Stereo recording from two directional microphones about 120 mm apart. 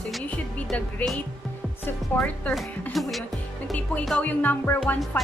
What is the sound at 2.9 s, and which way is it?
A woman's voice, centre (ahead or behind).